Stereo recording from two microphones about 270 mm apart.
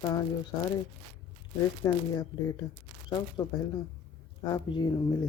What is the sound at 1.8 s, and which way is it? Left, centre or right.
Speech, centre.